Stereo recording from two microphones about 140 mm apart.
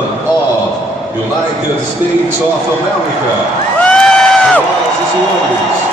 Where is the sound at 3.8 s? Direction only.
5° left (ahead or behind).